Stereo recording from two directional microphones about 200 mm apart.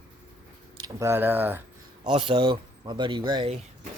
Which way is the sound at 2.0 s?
30° right (ahead or behind).